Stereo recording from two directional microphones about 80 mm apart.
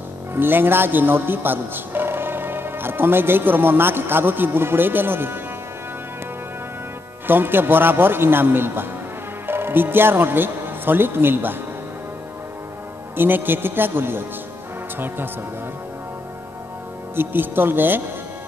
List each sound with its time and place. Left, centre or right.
0.3 s a man's voice: right
7.2 s a man's voice: right
13.1 s a man's voice: right
17.1 s a man's voice: right